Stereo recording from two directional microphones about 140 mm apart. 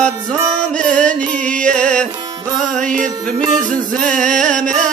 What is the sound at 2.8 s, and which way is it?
Music, 65° right (ahead or behind).